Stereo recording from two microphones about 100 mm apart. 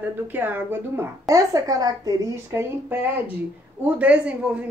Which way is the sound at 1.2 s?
35° right (ahead or behind).